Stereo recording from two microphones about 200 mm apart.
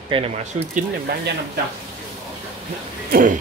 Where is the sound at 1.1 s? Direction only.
55° right (ahead or behind).